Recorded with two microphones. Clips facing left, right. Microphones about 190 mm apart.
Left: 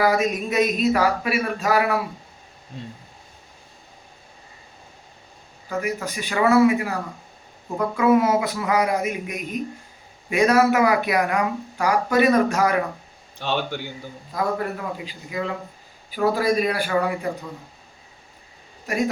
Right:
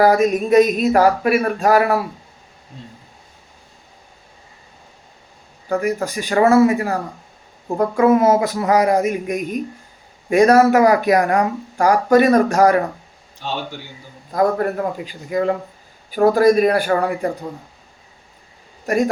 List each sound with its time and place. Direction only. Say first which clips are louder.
0.0 s speech: right 6 dB; 50° right (ahead or behind)
5.6 s speech: right 6 dB; 45° right (ahead or behind)
13.4 s a man's voice: left 1 dB; 65° left (ahead or behind)
14.3 s speech: right 7 dB; 45° right (ahead or behind)
18.9 s speech: right 6 dB; 45° right (ahead or behind)